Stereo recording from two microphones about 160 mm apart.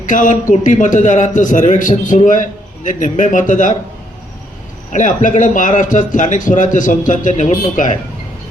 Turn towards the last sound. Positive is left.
turn(degrees=50)  # may be behind; listen again after turning